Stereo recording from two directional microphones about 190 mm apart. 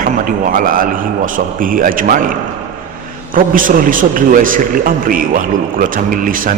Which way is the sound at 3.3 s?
45° right (ahead or behind).